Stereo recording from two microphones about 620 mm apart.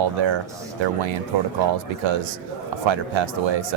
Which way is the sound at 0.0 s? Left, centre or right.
Right.